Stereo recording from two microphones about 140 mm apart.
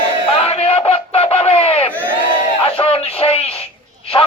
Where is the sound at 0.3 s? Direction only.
45° left (ahead or behind).